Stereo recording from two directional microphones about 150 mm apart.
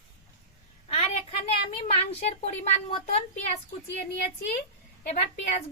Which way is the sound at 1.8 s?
45° left (ahead or behind).